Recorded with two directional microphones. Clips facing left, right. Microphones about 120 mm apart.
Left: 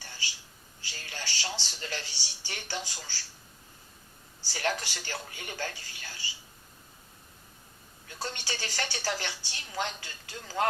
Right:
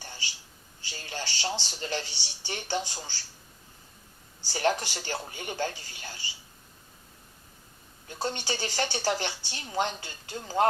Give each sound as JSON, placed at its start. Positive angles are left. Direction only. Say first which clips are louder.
{"t": 0.0, "sound": "a sound", "louder": "right 1 dB", "side_deg": -30}
{"t": 1.6, "sound": "speech", "louder": "right 5 dB", "side_deg": -35}
{"t": 4.4, "sound": "speech", "louder": "right 5 dB", "side_deg": -35}
{"t": 8.0, "sound": "speech", "louder": "right 6 dB", "side_deg": -30}